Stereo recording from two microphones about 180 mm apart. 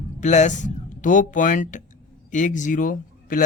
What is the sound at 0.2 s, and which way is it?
A man's voice, 40° left (ahead or behind).